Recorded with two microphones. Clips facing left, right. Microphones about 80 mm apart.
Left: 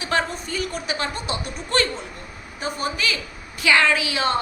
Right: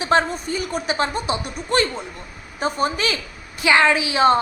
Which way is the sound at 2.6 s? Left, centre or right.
Right.